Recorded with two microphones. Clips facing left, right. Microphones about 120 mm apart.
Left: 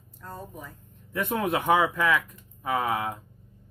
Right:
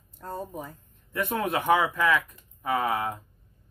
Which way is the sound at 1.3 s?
10° left (ahead or behind).